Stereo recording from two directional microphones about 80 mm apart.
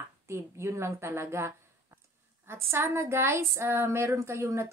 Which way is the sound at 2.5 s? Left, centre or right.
Right.